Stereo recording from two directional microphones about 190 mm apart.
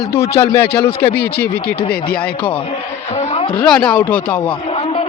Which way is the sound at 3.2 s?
30° left (ahead or behind).